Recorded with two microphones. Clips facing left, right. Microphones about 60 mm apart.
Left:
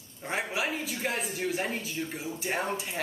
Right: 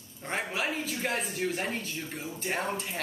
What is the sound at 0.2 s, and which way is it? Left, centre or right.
Speech, centre.